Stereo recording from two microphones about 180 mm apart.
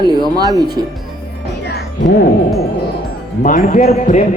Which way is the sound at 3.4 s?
45° left (ahead or behind).